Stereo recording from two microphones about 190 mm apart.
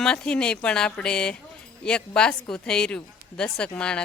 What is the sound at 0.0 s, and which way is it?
A woman's voice, 5° left (ahead or behind).